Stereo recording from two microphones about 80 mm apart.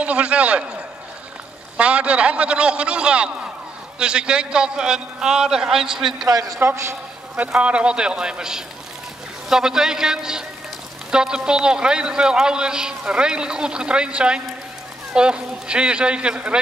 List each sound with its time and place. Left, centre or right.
0.0 s a man's voice: centre
1.8 s a man's voice: centre
6.2 s a man's voice: right
6.6 s a man's voice: right
7.3 s a man's voice: centre